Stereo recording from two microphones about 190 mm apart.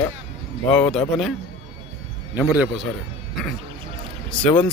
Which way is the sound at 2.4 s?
5° right (ahead or behind).